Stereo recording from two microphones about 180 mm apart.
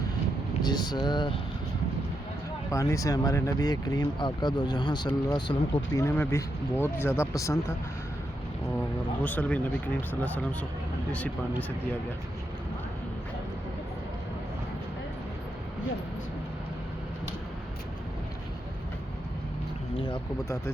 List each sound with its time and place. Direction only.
0.6 s speech: 25° left (ahead or behind)
2.6 s speech: 15° left (ahead or behind)
19.9 s speech: 30° left (ahead or behind)